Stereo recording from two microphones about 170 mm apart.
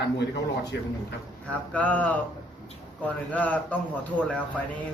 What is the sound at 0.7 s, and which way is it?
Speech, 80° left.